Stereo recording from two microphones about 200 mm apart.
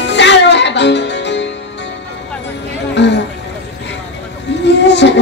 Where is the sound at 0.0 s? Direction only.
60° left (ahead or behind).